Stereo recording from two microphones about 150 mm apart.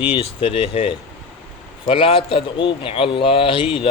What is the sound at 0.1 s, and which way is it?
Speech, 35° left (ahead or behind).